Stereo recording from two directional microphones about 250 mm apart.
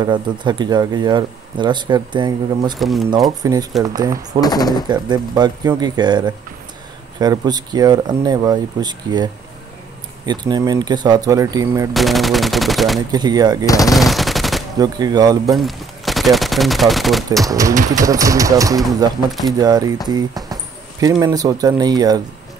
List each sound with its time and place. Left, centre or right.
0.0 s speech: centre
2.8 s speech: centre
3.3 s speech: centre
4.4 s speech: centre
4.8 s speech: centre
11.9 s speech: centre
13.1 s speech: centre
13.7 s speech: centre
13.9 s machine gun: centre
14.8 s speech: centre
15.5 s speech: centre
17.5 s speech: centre